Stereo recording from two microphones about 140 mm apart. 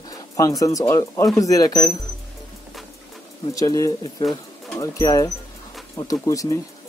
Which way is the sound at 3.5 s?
25° left (ahead or behind).